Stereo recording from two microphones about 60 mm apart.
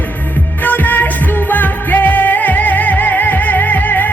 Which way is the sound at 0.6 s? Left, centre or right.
Left.